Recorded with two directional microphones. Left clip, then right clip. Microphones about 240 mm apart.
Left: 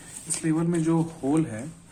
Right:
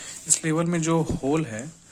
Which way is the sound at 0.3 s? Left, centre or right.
Right.